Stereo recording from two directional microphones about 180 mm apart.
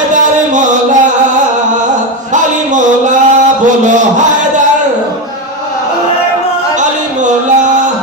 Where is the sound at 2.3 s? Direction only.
45° right (ahead or behind).